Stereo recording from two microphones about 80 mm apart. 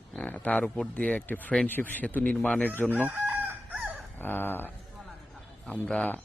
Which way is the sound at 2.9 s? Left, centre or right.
Right.